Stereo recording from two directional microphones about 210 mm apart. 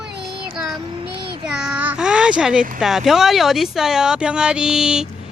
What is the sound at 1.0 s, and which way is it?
Child singing, 25° right (ahead or behind).